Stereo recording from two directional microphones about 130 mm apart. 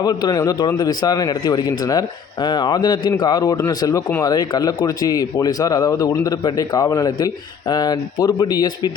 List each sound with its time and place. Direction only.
0.0 s a man's voice: 30° left (ahead or behind)